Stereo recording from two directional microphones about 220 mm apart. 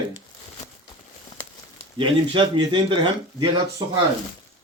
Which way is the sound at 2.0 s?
20° right (ahead or behind).